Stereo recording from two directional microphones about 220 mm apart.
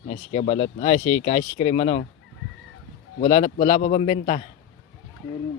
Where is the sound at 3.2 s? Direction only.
35° left (ahead or behind).